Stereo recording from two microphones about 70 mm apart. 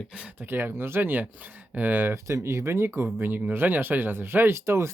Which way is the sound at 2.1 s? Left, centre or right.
Right.